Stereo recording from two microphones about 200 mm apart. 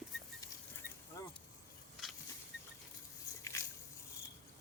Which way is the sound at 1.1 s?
15° left (ahead or behind).